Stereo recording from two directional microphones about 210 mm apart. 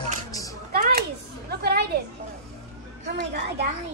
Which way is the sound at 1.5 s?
50° right (ahead or behind).